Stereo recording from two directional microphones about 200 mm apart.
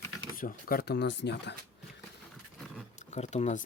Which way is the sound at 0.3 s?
45° left (ahead or behind).